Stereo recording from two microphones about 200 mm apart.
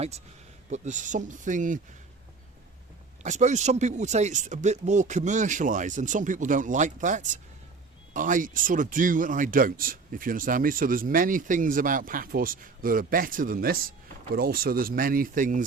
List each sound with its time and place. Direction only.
0.7 s speech: 35° right (ahead or behind)
3.2 s speech: 35° right (ahead or behind)